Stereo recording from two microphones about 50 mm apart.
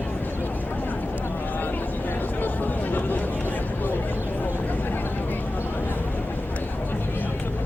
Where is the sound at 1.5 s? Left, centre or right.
Left.